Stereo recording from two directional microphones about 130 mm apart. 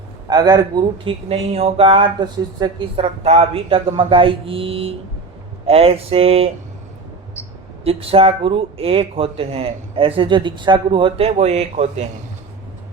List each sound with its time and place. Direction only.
0.3 s a man's voice: 30° right (ahead or behind)
1.0 s speech: 50° right (ahead or behind)
7.9 s speech: 50° right (ahead or behind)